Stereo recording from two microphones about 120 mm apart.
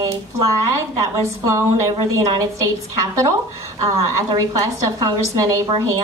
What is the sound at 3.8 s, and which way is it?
A woman's voice, 30° right (ahead or behind).